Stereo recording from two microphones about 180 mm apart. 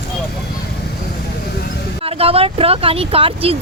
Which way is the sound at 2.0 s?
35° right (ahead or behind).